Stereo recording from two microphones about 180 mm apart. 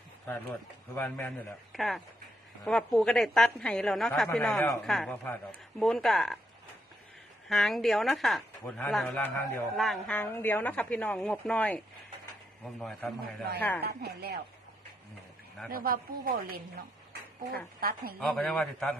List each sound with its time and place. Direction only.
0.9 s a woman's voice: 10° left (ahead or behind)
7.4 s a woman's voice: centre (ahead or behind)
13.8 s speech: 65° right (ahead or behind)
15.7 s a woman's voice: 55° right (ahead or behind)
18.2 s a woman's voice: centre (ahead or behind)